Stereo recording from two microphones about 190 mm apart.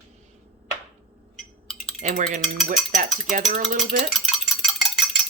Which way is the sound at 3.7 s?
40° right (ahead or behind).